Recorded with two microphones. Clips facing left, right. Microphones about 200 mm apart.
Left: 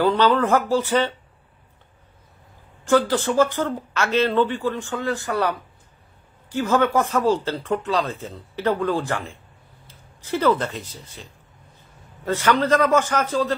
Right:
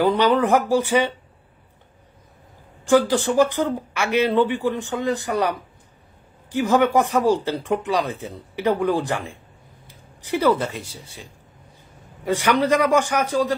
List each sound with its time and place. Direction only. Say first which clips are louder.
0.0 s speech: right 1 dB; 15° right (ahead or behind)
2.9 s speech: right 2 dB; 15° right (ahead or behind)